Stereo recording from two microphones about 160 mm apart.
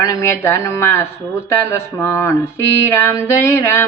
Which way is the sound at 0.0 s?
20° left (ahead or behind).